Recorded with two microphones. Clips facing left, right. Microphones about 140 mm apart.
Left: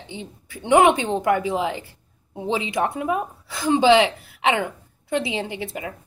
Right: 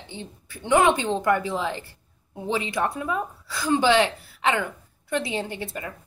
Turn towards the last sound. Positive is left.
turn(degrees=15)  # may be behind; listen again after turning